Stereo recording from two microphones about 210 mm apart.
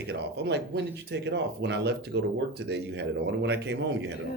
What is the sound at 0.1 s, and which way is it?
A man's voice, 50° right (ahead or behind).